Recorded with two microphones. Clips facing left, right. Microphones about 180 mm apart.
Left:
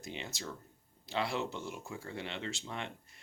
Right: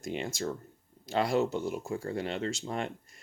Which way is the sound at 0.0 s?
50° right (ahead or behind).